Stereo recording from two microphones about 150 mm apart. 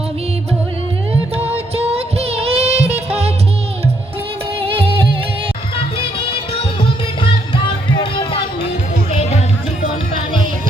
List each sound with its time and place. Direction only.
1.4 s music: 40° right (ahead or behind)
4.6 s music: 35° right (ahead or behind)
7.2 s music: 35° left (ahead or behind)